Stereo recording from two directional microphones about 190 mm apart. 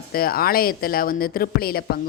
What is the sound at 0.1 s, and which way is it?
Speech, 50° left (ahead or behind).